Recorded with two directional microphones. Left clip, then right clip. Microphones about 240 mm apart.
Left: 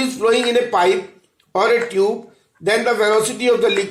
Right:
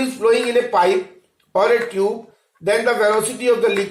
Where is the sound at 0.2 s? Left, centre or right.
Left.